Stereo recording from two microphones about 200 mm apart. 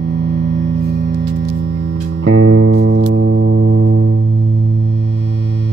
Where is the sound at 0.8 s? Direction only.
55° right (ahead or behind).